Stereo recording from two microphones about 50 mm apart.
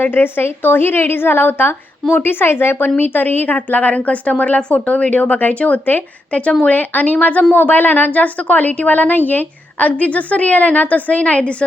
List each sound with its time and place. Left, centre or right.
0.0 s a woman's voice: left
3.0 s a woman's voice: left